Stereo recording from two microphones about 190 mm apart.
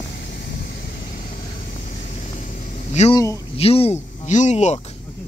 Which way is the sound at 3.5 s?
30° left (ahead or behind).